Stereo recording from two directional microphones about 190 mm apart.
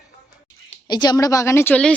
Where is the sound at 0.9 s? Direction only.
20° left (ahead or behind).